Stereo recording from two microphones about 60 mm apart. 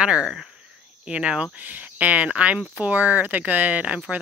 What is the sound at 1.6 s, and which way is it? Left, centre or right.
Speech, right.